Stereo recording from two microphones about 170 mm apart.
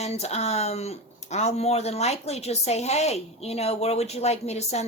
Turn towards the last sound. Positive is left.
turn(degrees=40)  # may be behind; listen again after turning